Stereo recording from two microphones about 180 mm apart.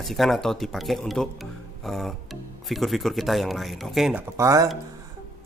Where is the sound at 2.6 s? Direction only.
Centre (ahead or behind).